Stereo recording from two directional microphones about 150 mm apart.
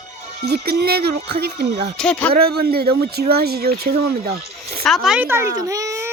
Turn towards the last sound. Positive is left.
turn(degrees=-20)  # may be behind; listen again after turning